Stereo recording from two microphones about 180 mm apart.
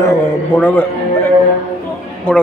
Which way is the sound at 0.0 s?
10° left (ahead or behind).